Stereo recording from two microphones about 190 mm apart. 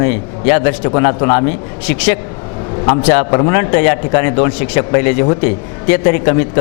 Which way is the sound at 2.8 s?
25° left (ahead or behind).